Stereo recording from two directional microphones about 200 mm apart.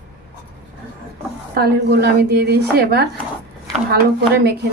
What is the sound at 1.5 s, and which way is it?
A woman's voice, 50° right (ahead or behind).